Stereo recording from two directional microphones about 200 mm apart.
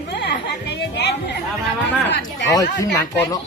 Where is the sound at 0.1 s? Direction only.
55° left (ahead or behind).